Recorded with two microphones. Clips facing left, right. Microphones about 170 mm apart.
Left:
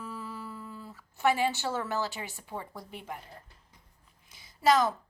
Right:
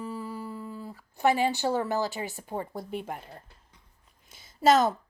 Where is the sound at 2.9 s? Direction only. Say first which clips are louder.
Right 7 dB; 50° right (ahead or behind).